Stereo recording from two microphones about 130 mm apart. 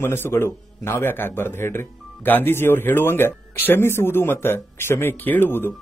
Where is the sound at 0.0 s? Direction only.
20° left (ahead or behind).